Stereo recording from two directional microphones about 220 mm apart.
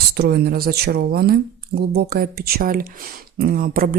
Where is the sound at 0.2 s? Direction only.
45° right (ahead or behind).